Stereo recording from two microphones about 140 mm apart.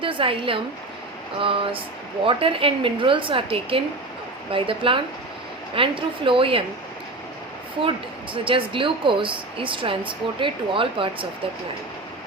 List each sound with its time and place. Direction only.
0.0 s a woman's voice: 40° right (ahead or behind)
7.9 s speech: 40° right (ahead or behind)